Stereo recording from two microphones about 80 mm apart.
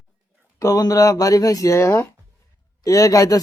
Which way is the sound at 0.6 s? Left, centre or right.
Left.